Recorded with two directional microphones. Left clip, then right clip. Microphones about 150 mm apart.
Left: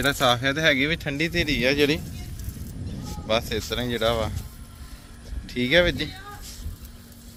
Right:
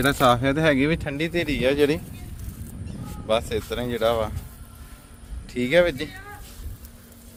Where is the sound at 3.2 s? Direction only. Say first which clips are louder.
Right 1 dB; 25° right (ahead or behind).